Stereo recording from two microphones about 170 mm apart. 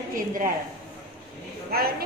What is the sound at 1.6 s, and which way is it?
Speech, 65° right (ahead or behind).